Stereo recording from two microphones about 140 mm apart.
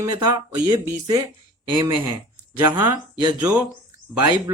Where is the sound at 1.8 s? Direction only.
15° right (ahead or behind).